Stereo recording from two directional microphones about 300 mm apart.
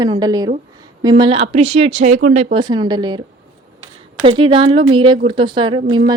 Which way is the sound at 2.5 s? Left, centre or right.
Centre.